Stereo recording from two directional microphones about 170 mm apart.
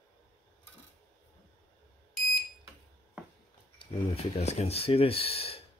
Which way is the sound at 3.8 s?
35° left (ahead or behind).